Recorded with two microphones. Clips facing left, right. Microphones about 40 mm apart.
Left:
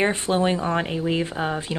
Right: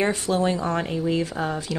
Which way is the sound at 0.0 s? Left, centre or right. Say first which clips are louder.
Left 1 dB; left.